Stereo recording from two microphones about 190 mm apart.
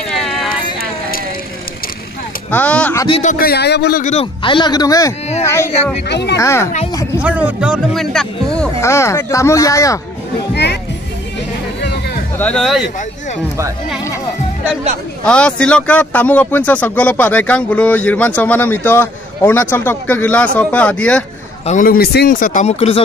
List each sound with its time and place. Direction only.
0.1 s a sound: centre (ahead or behind)
2.5 s speech: 5° left (ahead or behind)
3.1 s speech: 35° left (ahead or behind)
3.3 s speech: 55° left (ahead or behind)
4.0 s speech: 35° left (ahead or behind); by 5.7 s 15° left (ahead or behind)
6.0 s speech: 65° left (ahead or behind)
6.3 s speech: 15° left (ahead or behind)
7.2 s a man's voice: 10° right (ahead or behind)
8.8 s speech: 15° left (ahead or behind)
10.5 s music: 60° left (ahead or behind)
12.4 s a man's voice: 5° left (ahead or behind)
15.2 s speech: 5° left (ahead or behind)
21.6 s speech: 45° left (ahead or behind)